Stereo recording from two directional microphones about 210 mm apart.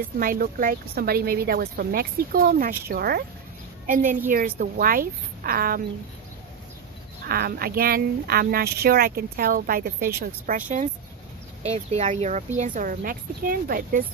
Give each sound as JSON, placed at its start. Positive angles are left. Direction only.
{"t": 0.2, "sound": "speech", "side_deg": -40}
{"t": 7.2, "sound": "speech", "side_deg": -45}